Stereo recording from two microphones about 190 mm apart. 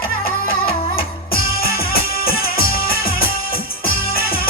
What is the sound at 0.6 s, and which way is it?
Music, 50° left (ahead or behind).